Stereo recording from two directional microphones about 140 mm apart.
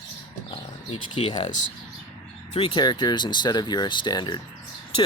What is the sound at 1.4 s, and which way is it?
Speech, 60° left (ahead or behind).